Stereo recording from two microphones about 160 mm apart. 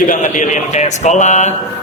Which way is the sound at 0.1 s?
50° left (ahead or behind).